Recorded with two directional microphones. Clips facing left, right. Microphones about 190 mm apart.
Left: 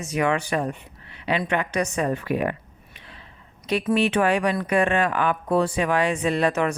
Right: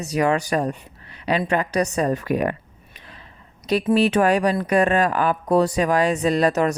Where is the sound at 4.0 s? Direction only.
40° right (ahead or behind).